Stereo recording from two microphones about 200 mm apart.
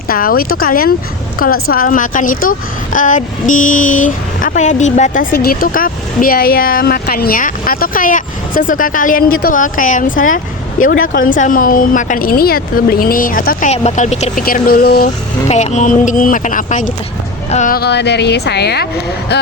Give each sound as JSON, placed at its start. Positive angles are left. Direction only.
{"t": 0.1, "sound": "speech", "side_deg": 45}
{"t": 15.4, "sound": "speech", "side_deg": 35}